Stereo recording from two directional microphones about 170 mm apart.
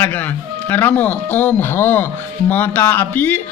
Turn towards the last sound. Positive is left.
turn(degrees=10)  # may be behind; listen again after turning